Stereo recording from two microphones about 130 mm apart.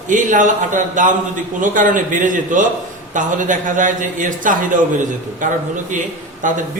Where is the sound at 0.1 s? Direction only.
80° right.